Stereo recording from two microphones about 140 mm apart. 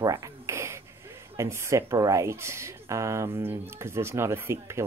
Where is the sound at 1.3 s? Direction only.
20° right (ahead or behind).